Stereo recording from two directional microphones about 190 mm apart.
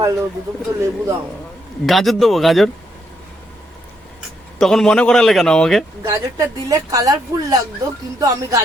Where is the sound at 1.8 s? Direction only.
Centre (ahead or behind).